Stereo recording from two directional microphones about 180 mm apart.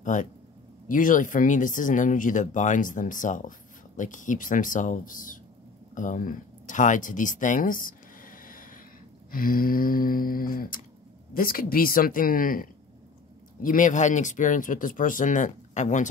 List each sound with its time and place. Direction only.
0.0 s speech: 45° left (ahead or behind)